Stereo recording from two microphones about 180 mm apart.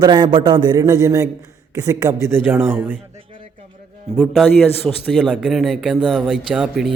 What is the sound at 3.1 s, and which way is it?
Music, 30° right (ahead or behind).